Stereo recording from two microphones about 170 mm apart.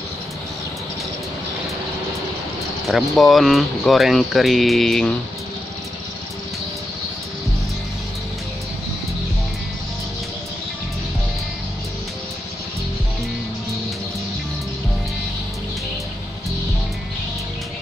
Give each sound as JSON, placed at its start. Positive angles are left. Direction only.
{"t": 2.9, "sound": "speech", "side_deg": 0}